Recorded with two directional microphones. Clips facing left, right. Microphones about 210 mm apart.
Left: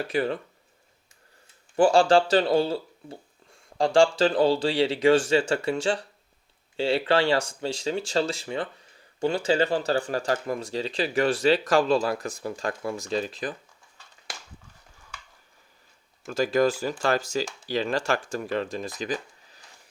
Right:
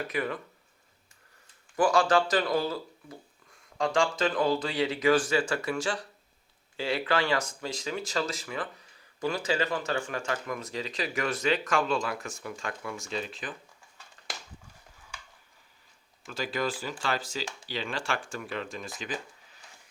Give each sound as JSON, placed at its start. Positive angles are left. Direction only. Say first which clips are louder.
{"t": 0.1, "sound": "speech", "louder": "left 8 dB", "side_deg": 30}
{"t": 1.7, "sound": "speech", "louder": "left 5 dB", "side_deg": 30}
{"t": 16.2, "sound": "speech", "louder": "left 9 dB", "side_deg": 45}